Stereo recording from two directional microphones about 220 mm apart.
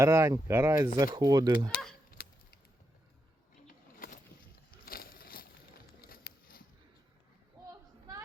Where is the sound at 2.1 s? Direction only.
40° left (ahead or behind).